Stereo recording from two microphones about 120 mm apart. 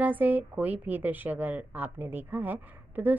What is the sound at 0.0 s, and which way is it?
A woman's voice, 15° right (ahead or behind).